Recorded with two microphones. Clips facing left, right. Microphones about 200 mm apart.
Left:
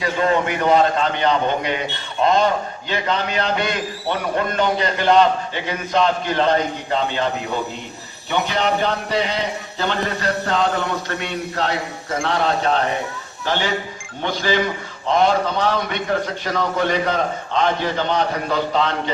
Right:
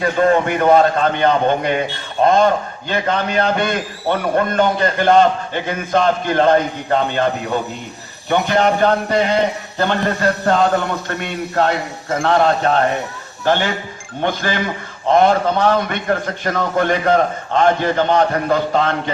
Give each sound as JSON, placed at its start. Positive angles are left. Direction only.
{"t": 0.0, "sound": "a man's voice", "side_deg": -50}
{"t": 8.3, "sound": "a man's voice", "side_deg": -50}